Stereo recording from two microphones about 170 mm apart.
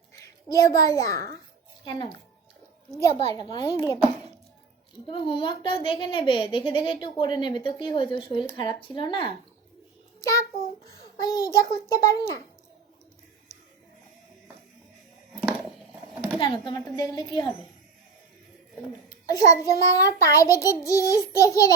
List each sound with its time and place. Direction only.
0.1 s a child's voice: 20° left (ahead or behind)
5.0 s a woman's voice: 30° left (ahead or behind)
10.2 s child singing: 20° left (ahead or behind)
11.2 s a woman's voice: 20° left (ahead or behind)
16.4 s a woman's voice: 30° left (ahead or behind)
19.3 s a woman's voice: 20° left (ahead or behind)